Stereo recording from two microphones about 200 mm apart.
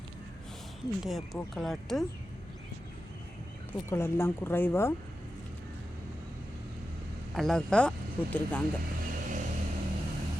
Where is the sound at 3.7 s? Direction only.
10° left (ahead or behind).